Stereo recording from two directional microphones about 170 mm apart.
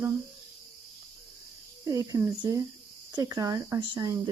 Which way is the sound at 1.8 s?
20° right (ahead or behind).